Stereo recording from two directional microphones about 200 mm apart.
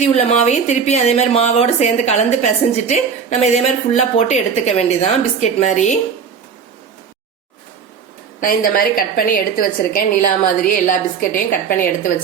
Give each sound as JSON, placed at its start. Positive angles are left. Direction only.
{"t": 0.0, "sound": "speech", "side_deg": 35}
{"t": 8.4, "sound": "a woman's voice", "side_deg": 45}